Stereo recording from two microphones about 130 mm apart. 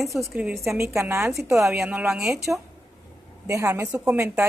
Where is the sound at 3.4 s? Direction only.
20° right (ahead or behind).